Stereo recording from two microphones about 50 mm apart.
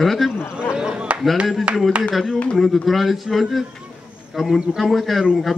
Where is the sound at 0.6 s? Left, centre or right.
Centre.